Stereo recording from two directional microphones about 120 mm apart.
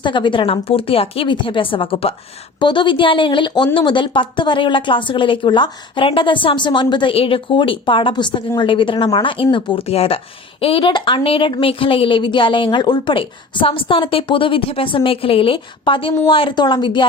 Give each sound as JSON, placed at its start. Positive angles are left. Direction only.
{"t": 0.0, "sound": "a woman's voice", "side_deg": 40}